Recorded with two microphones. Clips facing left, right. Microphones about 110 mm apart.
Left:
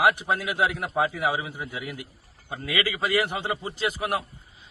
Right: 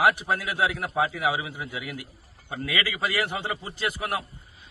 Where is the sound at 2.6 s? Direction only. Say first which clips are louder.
Left 1 dB; 15° left (ahead or behind).